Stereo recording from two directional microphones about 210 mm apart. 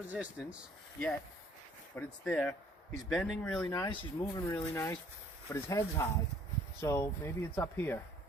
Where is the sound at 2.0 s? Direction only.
5° left (ahead or behind).